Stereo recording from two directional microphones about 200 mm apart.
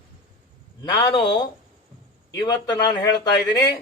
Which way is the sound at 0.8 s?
25° left (ahead or behind).